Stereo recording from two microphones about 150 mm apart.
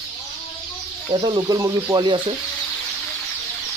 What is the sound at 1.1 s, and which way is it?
Speech, 35° right (ahead or behind).